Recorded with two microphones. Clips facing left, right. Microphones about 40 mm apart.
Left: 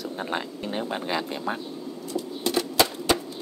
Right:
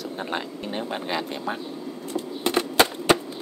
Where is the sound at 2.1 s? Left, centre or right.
Right.